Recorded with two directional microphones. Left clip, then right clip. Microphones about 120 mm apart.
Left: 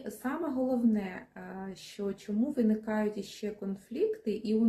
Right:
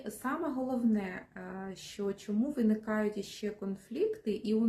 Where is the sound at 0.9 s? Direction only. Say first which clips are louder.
Even; 25° right (ahead or behind).